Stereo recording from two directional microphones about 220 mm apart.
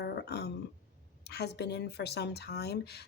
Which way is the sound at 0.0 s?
50° left (ahead or behind).